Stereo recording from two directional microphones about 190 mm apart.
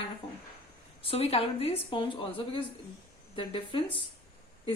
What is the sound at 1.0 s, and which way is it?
Speech, 30° left (ahead or behind).